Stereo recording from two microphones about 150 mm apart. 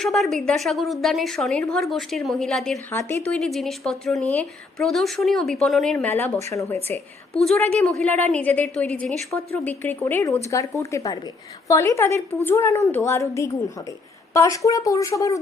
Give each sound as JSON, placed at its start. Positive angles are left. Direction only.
{"t": 0.0, "sound": "a woman's voice", "side_deg": 0}
{"t": 7.8, "sound": "a woman's voice", "side_deg": 5}